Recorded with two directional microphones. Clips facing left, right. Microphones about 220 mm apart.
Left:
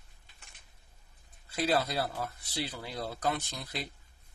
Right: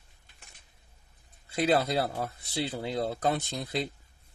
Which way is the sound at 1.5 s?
20° right (ahead or behind).